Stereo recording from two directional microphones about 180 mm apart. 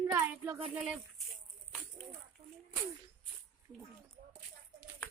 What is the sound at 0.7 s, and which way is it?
Speech, 5° right (ahead or behind).